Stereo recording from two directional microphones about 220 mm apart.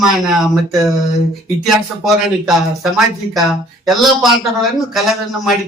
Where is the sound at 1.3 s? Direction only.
Centre (ahead or behind).